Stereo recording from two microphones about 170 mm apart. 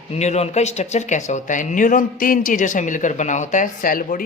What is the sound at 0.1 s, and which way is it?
Speech, 40° left (ahead or behind).